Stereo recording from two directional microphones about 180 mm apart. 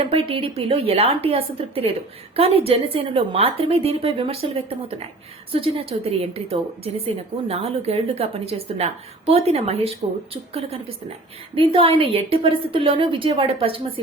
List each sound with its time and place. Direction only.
0.0 s a woman's voice: 30° right (ahead or behind)